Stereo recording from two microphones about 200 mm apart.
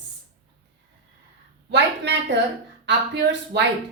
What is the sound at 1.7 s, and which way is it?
A woman's voice, 60° right (ahead or behind).